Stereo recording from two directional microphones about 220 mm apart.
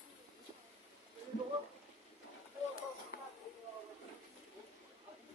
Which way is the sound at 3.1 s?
40° left (ahead or behind).